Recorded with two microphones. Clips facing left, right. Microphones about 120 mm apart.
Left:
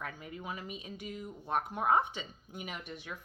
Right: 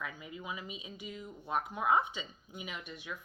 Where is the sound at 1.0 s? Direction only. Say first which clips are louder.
Left 1 dB; 50° left (ahead or behind).